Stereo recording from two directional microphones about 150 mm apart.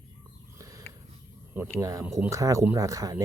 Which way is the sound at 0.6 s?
25° right (ahead or behind).